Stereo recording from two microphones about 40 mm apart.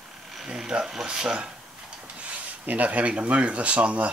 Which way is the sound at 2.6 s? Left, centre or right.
Right.